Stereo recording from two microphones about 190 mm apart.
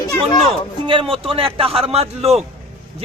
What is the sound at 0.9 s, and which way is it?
Speech, 30° right (ahead or behind).